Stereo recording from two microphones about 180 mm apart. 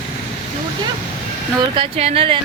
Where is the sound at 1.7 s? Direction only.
35° right (ahead or behind).